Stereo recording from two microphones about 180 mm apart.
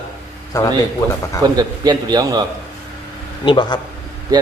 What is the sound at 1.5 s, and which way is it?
Speech, 20° right (ahead or behind).